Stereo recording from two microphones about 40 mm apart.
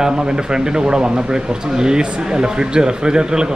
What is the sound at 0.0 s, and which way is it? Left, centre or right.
Speech, centre.